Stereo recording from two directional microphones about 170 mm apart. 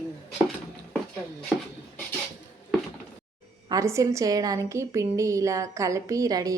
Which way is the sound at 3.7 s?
20° right (ahead or behind).